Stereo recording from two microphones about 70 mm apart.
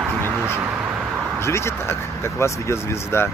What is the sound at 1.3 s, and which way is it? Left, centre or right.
Speech, left.